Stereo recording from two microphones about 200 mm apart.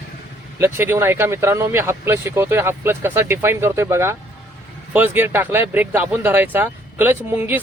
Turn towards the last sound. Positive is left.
turn(degrees=-10)  # may be behind; listen again after turning